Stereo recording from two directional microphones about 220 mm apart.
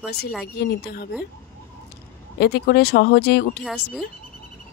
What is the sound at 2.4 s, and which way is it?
Speech, 45° left (ahead or behind).